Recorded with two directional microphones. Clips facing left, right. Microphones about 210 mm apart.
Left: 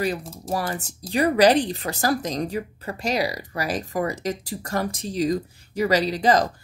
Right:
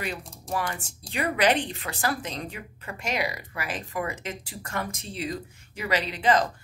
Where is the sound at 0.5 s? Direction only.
40° left (ahead or behind).